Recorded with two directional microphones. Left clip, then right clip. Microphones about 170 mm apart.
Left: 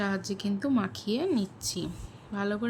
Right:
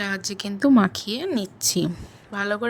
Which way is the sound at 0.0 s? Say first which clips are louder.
Right 5 dB; 55° right (ahead or behind).